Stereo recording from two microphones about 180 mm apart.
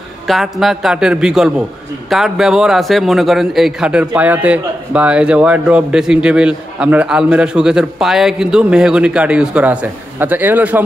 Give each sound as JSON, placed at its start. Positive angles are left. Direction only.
{"t": 0.3, "sound": "a man's voice", "side_deg": 0}